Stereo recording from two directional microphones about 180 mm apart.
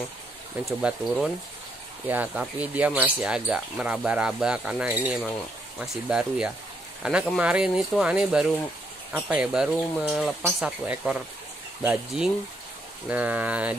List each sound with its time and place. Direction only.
0.7 s speech: centre (ahead or behind)